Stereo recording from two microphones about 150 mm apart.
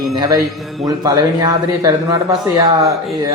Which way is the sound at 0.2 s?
25° right (ahead or behind).